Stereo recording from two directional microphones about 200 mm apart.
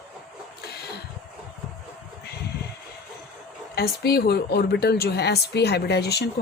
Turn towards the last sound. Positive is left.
turn(degrees=55)  # may be behind; listen again after turning